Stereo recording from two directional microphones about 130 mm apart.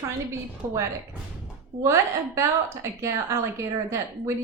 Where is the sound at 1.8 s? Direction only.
20° right (ahead or behind).